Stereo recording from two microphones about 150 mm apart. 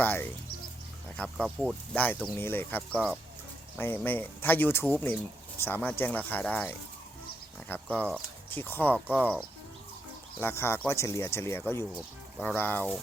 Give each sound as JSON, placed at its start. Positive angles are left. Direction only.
{"t": 0.0, "sound": "speech", "side_deg": 10}
{"t": 1.5, "sound": "speech", "side_deg": -5}
{"t": 1.9, "sound": "speech", "side_deg": 10}
{"t": 10.4, "sound": "speech", "side_deg": 15}